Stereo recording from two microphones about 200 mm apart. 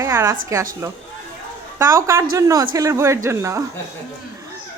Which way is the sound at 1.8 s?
15° right (ahead or behind).